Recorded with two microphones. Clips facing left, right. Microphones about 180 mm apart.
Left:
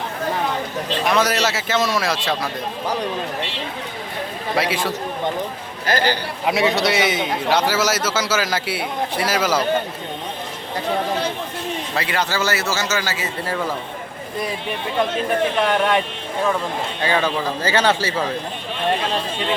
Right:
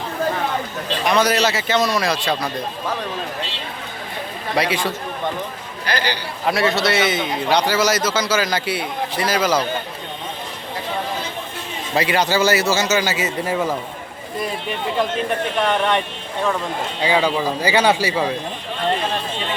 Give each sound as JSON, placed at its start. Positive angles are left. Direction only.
{"t": 1.0, "sound": "a man's voice", "side_deg": 0}
{"t": 4.5, "sound": "a man's voice", "side_deg": 0}
{"t": 5.8, "sound": "a man's voice", "side_deg": 45}
{"t": 6.5, "sound": "a man's voice", "side_deg": 15}
{"t": 11.9, "sound": "speech", "side_deg": -15}
{"t": 15.5, "sound": "a man's voice", "side_deg": 0}
{"t": 17.0, "sound": "speech", "side_deg": -15}